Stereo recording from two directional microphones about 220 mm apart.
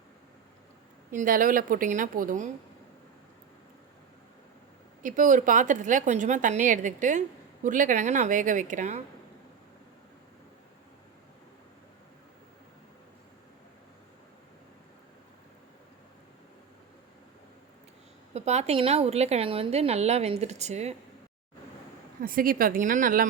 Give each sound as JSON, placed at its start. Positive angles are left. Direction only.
{"t": 1.1, "sound": "a woman's voice", "side_deg": -40}
{"t": 5.0, "sound": "a woman's voice", "side_deg": -35}
{"t": 18.3, "sound": "a woman's voice", "side_deg": -30}
{"t": 22.2, "sound": "a woman's voice", "side_deg": -40}